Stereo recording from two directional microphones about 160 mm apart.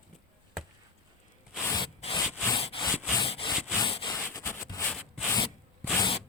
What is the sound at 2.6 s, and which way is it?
Wood, 35° left (ahead or behind).